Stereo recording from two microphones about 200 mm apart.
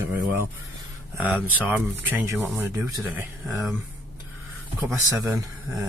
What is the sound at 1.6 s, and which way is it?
Speech, 10° right (ahead or behind).